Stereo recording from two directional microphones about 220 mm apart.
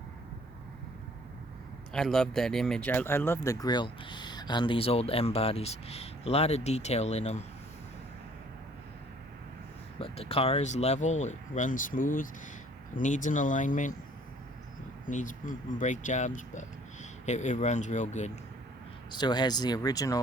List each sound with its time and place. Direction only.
1.9 s speech: 5° left (ahead or behind); by 7.4 s 30° left (ahead or behind)
10.0 s speech: 25° left (ahead or behind)
15.0 s speech: 35° left (ahead or behind)
19.1 s speech: 20° left (ahead or behind)